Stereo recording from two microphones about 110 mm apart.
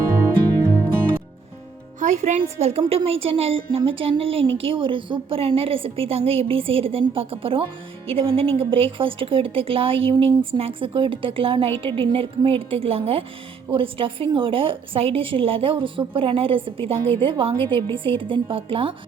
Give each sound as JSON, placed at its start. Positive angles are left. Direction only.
{"t": 2.0, "sound": "a woman's voice", "side_deg": -90}